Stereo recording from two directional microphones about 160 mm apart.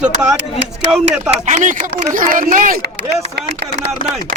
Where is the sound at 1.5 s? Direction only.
50° right (ahead or behind).